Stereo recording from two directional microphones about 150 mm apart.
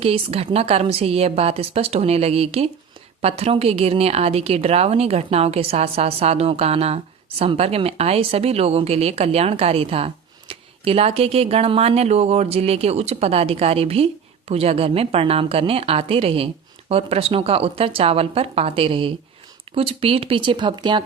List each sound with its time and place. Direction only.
0.0 s a woman's voice: 40° right (ahead or behind)